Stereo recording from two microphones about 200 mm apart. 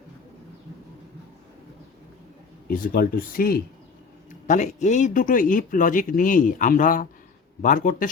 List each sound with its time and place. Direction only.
2.6 s speech: 45° left (ahead or behind)